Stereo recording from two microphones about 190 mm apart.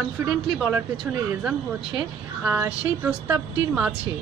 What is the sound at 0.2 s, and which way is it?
Speech, 15° right (ahead or behind).